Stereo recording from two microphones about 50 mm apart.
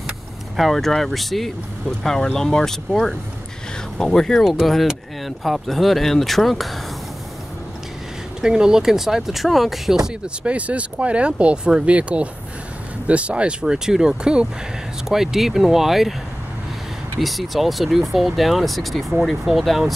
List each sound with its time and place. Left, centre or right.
0.6 s speech: centre
1.9 s speech: centre
8.4 s speech: centre
10.2 s speech: right; by 16.2 s centre
17.2 s speech: centre